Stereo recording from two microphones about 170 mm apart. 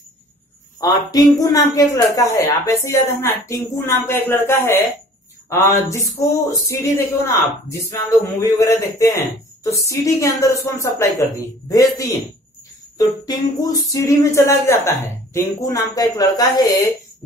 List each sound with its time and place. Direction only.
0.7 s a woman's voice: 20° left (ahead or behind)